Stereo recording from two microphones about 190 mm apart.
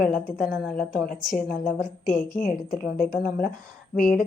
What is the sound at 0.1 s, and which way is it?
A woman's voice, centre (ahead or behind).